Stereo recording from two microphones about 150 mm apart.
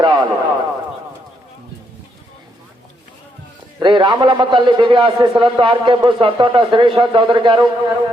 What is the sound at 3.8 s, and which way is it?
A man's voice, 30° right (ahead or behind).